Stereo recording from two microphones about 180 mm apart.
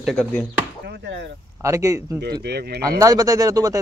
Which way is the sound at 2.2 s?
65° right (ahead or behind).